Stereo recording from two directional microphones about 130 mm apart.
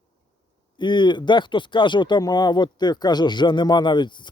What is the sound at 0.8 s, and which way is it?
Speech, 35° left (ahead or behind).